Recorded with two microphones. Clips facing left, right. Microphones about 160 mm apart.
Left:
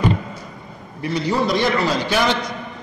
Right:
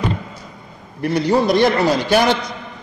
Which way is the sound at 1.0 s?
55° right (ahead or behind).